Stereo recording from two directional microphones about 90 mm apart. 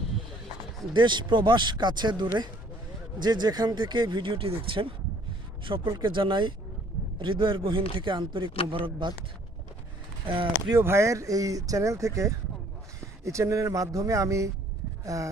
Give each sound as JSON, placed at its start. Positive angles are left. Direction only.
{"t": 0.9, "sound": "speech", "side_deg": -60}
{"t": 5.6, "sound": "a man's voice", "side_deg": -65}
{"t": 10.2, "sound": "speech", "side_deg": -80}
{"t": 10.8, "sound": "speech", "side_deg": -30}
{"t": 15.0, "sound": "a sound", "side_deg": -40}